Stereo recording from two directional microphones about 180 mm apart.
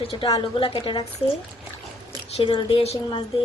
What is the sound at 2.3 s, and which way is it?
Speech, 25° left (ahead or behind).